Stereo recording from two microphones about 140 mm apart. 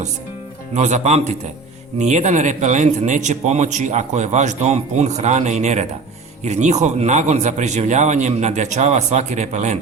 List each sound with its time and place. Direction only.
0.7 s a man's voice: 55° right (ahead or behind)